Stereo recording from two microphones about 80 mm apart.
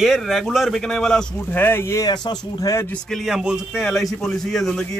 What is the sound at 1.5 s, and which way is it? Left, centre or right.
Speech, left.